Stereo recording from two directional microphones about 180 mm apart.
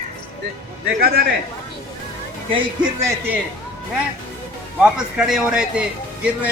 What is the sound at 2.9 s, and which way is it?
Speech, 15° right (ahead or behind).